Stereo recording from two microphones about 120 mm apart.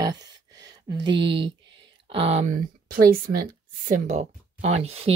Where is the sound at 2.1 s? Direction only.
60° right (ahead or behind).